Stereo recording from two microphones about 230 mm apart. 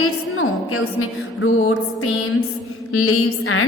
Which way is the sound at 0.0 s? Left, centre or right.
Left.